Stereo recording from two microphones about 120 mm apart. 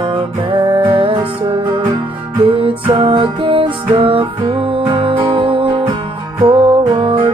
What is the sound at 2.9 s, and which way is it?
Music, 45° right (ahead or behind).